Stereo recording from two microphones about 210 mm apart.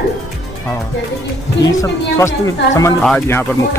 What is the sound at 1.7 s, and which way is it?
Speech, 15° left (ahead or behind).